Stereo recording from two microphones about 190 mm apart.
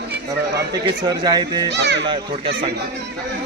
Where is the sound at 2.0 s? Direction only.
25° right (ahead or behind).